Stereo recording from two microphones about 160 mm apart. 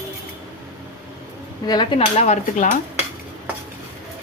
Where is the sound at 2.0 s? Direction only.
45° left (ahead or behind).